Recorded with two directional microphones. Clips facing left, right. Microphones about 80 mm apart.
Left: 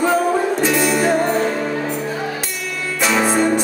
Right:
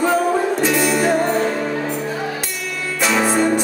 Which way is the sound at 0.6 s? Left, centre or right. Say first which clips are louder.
Even; left.